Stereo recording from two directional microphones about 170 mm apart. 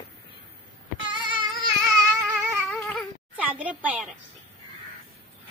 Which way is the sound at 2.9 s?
10° right (ahead or behind).